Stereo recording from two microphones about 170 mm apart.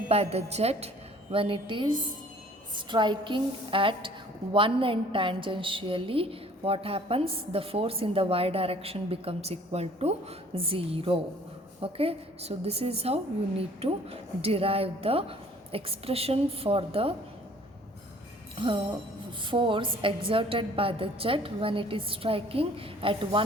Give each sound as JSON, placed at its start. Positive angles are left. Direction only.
{"t": 0.1, "sound": "a woman's voice", "side_deg": -40}
{"t": 18.5, "sound": "music", "side_deg": -30}
{"t": 19.5, "sound": "a woman's voice", "side_deg": -30}